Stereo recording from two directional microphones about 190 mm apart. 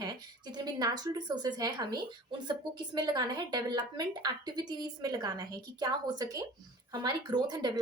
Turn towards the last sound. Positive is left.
turn(degrees=-20)  # may be behind; listen again after turning